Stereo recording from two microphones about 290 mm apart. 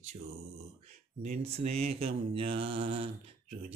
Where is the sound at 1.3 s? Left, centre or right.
Right.